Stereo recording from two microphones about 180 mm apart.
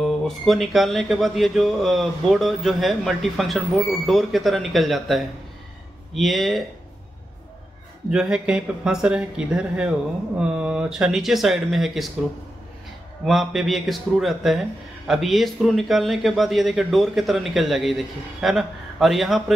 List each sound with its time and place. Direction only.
0.0 s speech: centre (ahead or behind)
8.1 s speech: 5° right (ahead or behind)
13.2 s speech: centre (ahead or behind)